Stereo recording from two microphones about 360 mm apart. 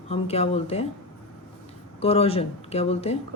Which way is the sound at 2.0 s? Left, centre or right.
Centre.